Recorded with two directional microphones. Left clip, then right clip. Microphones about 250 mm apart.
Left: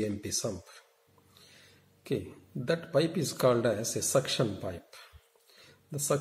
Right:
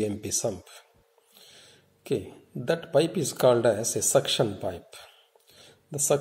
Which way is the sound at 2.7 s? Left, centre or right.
Centre.